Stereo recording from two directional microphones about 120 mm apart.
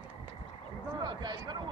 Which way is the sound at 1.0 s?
35° right (ahead or behind).